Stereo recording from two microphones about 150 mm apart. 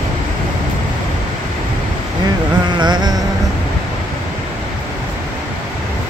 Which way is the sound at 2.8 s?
30° right (ahead or behind).